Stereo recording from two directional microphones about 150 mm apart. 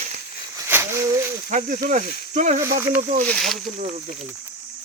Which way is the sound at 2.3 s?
55° right (ahead or behind).